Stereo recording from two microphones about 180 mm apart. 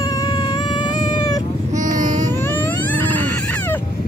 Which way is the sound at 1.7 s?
45° right (ahead or behind).